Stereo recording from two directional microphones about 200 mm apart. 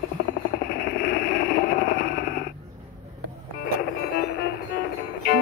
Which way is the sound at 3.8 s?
55° left (ahead or behind).